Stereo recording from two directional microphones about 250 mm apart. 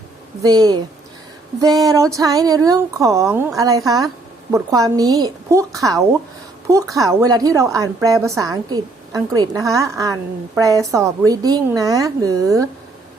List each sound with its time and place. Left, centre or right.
0.4 s a woman's voice: centre